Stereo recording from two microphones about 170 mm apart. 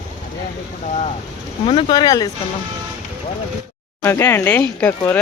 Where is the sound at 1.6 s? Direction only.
25° left (ahead or behind).